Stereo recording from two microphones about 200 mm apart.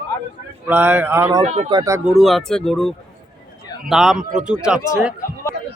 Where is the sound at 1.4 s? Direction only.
35° right (ahead or behind).